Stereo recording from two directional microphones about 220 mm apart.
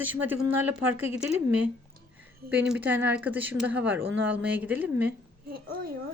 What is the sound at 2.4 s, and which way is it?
Speech, 5° right (ahead or behind).